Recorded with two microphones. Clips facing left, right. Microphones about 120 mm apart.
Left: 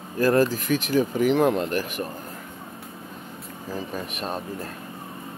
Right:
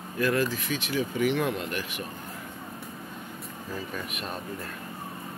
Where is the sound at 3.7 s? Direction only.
30° left (ahead or behind).